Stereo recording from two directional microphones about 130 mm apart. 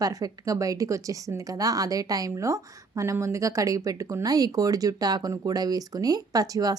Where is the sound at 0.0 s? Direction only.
25° right (ahead or behind).